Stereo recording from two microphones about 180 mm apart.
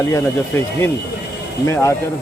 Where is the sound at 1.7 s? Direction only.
15° left (ahead or behind).